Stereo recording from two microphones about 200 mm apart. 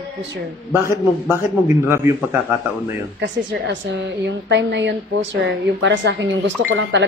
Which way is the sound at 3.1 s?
60° right (ahead or behind).